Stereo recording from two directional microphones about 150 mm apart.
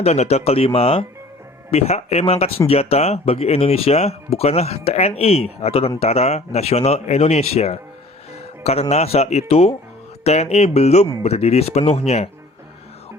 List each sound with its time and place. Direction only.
0.0 s speech: 45° left (ahead or behind)